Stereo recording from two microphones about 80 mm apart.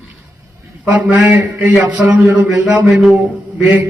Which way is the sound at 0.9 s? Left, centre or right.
Centre.